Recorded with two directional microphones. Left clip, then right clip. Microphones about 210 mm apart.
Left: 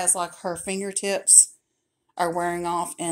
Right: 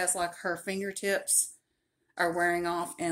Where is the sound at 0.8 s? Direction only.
15° right (ahead or behind).